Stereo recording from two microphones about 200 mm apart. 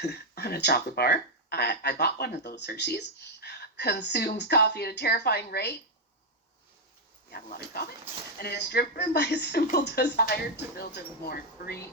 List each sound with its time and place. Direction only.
0.0 s speech: 55° left (ahead or behind)
7.3 s speech: 50° left (ahead or behind)